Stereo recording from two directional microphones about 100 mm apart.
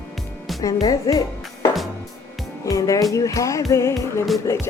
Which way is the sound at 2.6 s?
35° left (ahead or behind).